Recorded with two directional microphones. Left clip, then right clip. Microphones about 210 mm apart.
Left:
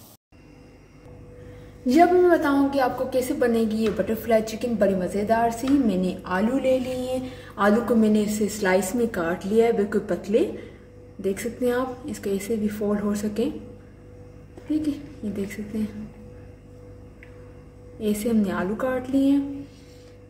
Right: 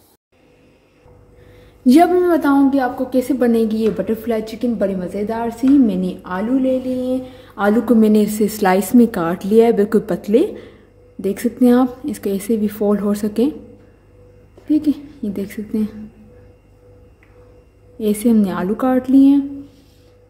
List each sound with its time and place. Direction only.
1.9 s a woman's voice: 50° right (ahead or behind)
7.5 s a woman's voice: 40° right (ahead or behind)
14.7 s a woman's voice: 50° right (ahead or behind)
18.0 s a woman's voice: 50° right (ahead or behind)